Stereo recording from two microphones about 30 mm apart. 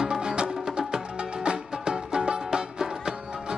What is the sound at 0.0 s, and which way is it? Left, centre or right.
Music, right.